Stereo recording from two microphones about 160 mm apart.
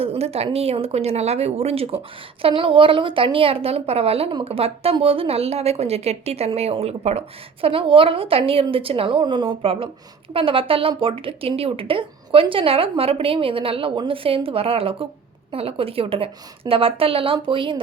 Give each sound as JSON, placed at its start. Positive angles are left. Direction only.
{"t": 0.0, "sound": "a woman's voice", "side_deg": -40}